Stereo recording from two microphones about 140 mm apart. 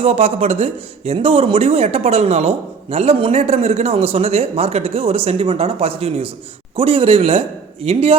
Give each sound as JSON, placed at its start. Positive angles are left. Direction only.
{"t": 0.0, "sound": "a man's voice", "side_deg": -50}